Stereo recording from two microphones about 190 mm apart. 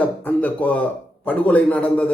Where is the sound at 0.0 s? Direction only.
10° left (ahead or behind).